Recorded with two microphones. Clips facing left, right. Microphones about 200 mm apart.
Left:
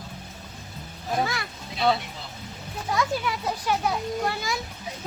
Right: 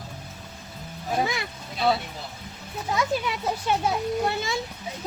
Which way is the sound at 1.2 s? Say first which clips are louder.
Right 1 dB; 20° right (ahead or behind).